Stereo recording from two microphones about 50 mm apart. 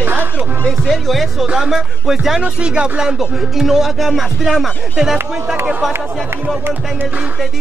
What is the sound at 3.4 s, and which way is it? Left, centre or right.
Music, centre.